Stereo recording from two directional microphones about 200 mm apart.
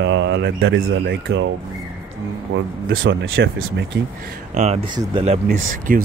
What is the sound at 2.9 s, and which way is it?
Speech, 75° right (ahead or behind).